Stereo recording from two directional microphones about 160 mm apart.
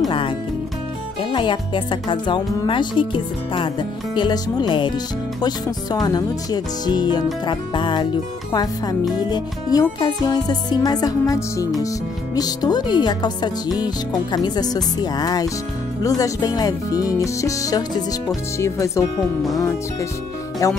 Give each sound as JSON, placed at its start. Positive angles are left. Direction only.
{"t": 1.3, "sound": "speech", "side_deg": 30}
{"t": 20.6, "sound": "speech", "side_deg": 20}